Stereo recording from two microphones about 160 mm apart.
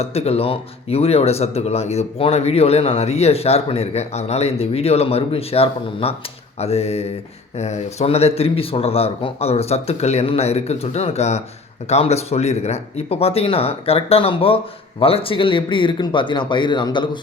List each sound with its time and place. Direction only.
0.0 s speech: 40° left (ahead or behind)